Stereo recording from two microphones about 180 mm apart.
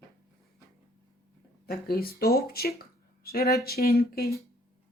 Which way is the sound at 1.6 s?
55° left (ahead or behind).